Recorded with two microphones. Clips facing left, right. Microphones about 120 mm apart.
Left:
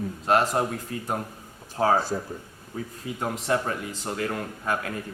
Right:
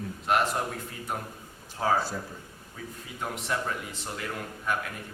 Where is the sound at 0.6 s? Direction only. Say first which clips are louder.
Left 6 dB; 55° left (ahead or behind).